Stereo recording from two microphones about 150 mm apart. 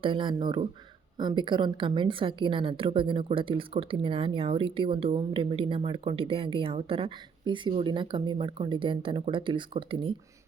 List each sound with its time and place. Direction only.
0.0 s a woman's voice: 35° right (ahead or behind)